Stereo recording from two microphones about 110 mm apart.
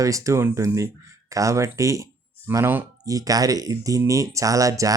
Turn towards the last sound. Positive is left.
turn(degrees=-30)  # may be behind; listen again after turning